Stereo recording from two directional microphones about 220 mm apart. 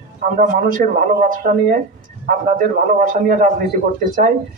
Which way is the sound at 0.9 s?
40° right (ahead or behind).